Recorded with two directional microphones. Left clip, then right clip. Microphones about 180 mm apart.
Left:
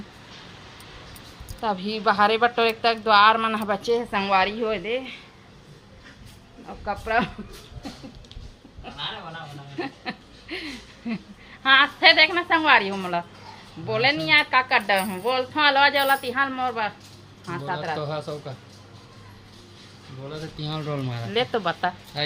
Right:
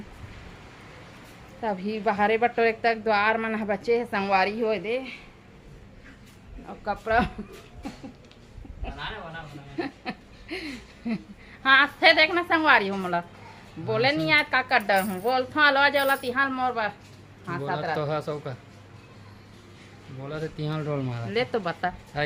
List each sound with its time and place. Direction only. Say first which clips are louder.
1.6 s a woman's voice: left 4 dB; 10° right (ahead or behind)
6.7 s a woman's voice: even; 5° right (ahead or behind)
9.7 s a sound: left 1 dB; 15° right (ahead or behind)
11.6 s a woman's voice: left 2 dB; 15° right (ahead or behind)
16.3 s a woman's voice: left 1 dB; 5° right (ahead or behind)
17.9 s speech: right 1 dB; 65° right (ahead or behind)
20.6 s speech: even; 45° right (ahead or behind)
20.8 s a woman's voice: even; 15° right (ahead or behind)